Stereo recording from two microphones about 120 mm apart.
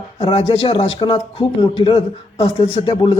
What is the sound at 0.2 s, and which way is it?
A man's voice, 50° left (ahead or behind).